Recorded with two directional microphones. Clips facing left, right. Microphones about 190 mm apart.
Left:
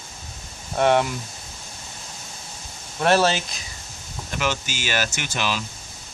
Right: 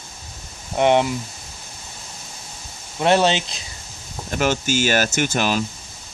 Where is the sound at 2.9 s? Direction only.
20° right (ahead or behind).